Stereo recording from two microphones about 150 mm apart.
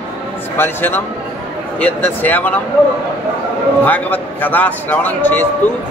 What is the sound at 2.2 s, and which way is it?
Speech, 10° left (ahead or behind).